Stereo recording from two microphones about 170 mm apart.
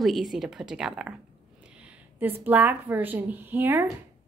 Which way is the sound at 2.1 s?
10° right (ahead or behind).